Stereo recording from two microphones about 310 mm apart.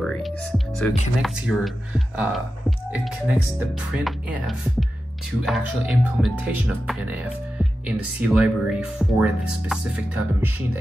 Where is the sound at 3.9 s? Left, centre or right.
Centre.